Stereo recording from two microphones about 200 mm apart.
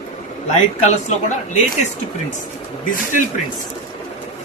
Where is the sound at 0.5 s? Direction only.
35° left (ahead or behind).